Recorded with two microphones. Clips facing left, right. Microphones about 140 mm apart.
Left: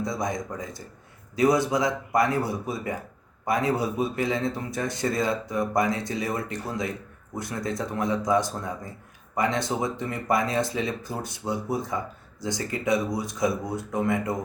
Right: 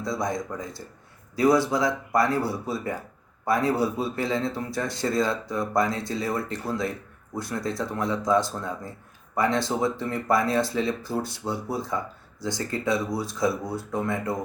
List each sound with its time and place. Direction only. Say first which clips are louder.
0.0 s speech: right 1 dB; 20° left (ahead or behind)